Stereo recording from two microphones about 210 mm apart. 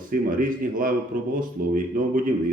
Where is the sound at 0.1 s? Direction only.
40° right (ahead or behind).